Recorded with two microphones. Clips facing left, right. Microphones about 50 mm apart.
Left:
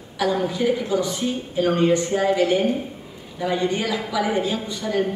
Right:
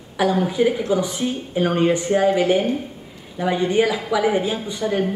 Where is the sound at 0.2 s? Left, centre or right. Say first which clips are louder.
Right 3 dB; right.